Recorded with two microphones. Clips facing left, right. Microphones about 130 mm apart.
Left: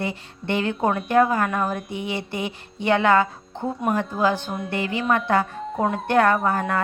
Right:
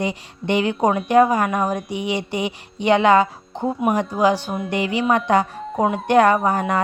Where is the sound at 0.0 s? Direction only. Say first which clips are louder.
Right 4 dB; 15° right (ahead or behind).